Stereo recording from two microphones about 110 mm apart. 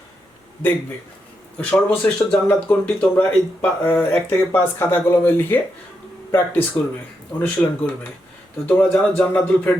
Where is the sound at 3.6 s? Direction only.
15° left (ahead or behind).